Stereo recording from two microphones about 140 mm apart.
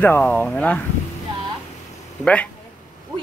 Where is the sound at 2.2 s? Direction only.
10° left (ahead or behind).